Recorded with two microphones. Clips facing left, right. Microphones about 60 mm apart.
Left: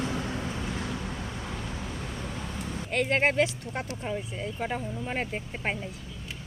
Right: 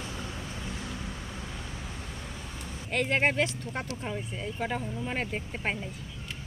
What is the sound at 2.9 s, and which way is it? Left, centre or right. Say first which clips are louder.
Speech: left 2 dB; centre.